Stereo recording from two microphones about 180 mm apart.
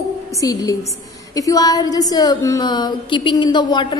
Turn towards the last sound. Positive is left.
turn(degrees=25)  # may be behind; listen again after turning